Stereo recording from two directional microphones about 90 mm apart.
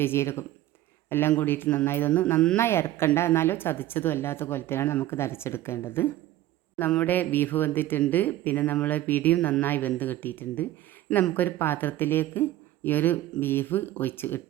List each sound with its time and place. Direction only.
0.0 s speech: 25° left (ahead or behind)